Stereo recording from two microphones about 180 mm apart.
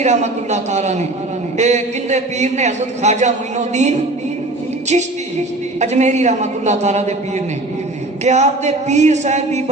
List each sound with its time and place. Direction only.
0.0 s a man's voice: 40° right (ahead or behind)
5.8 s a man's voice: 40° right (ahead or behind)
8.2 s a man's voice: 40° right (ahead or behind)